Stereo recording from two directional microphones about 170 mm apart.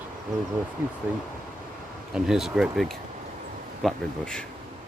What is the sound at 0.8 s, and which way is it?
Speech, 10° right (ahead or behind).